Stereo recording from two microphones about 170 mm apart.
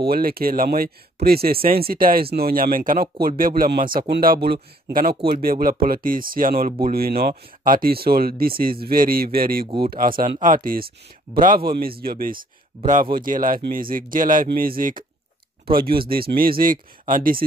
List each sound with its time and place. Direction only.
0.0 s speech: 65° right (ahead or behind)
4.1 s speech: 65° right (ahead or behind)